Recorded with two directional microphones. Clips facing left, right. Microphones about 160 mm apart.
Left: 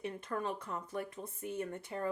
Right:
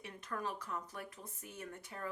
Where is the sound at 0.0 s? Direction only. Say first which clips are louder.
Left 5 dB; 30° left (ahead or behind).